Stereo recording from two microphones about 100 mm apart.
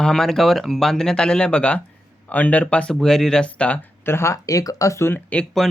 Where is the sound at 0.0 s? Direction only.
5° left (ahead or behind).